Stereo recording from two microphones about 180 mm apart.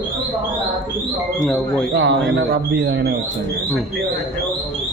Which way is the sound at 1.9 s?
75° right (ahead or behind).